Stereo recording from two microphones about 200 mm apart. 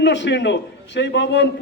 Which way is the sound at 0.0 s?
60° left (ahead or behind).